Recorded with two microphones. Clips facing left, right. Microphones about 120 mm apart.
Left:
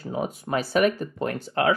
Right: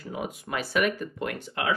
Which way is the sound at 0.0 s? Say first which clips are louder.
Left 5 dB; 35° left (ahead or behind).